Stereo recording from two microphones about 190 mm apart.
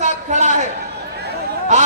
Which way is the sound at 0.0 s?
35° right (ahead or behind).